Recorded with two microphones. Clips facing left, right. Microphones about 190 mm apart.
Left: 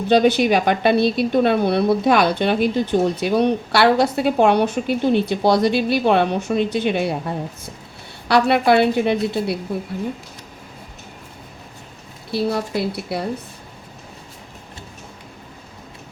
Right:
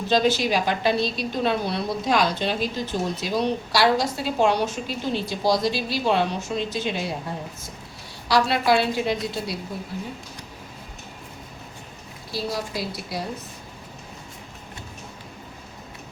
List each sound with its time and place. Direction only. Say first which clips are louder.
0.1 s a woman's voice: left 6 dB; 60° left (ahead or behind)
12.3 s a woman's voice: left 7 dB; 60° left (ahead or behind)